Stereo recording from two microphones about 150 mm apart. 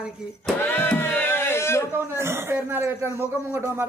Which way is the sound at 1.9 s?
15° right (ahead or behind).